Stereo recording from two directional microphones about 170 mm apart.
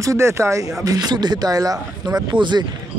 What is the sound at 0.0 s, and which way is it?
Speech, 15° right (ahead or behind).